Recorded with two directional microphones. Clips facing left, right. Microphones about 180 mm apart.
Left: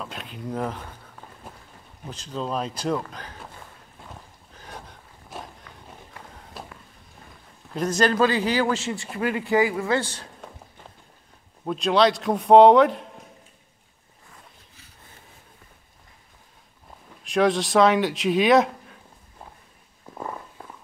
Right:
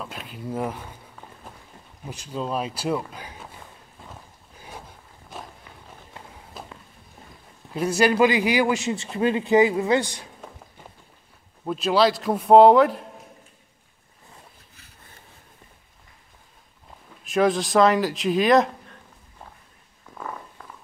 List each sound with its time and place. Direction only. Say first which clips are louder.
0.0 s a man's voice: even; centre (ahead or behind)
4.6 s a sound: even; 5° right (ahead or behind)
6.5 s a sound: even; centre (ahead or behind)
7.7 s a man's voice: right 2 dB; 10° right (ahead or behind)
11.6 s a man's voice: even; 5° right (ahead or behind)
17.1 s speech: even; centre (ahead or behind)